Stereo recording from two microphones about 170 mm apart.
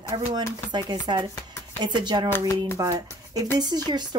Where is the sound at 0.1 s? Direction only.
30° right (ahead or behind).